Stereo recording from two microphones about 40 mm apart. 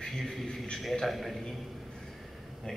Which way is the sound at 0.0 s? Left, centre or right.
Centre.